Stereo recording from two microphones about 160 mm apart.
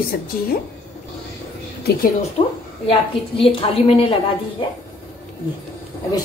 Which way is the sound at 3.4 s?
35° left (ahead or behind).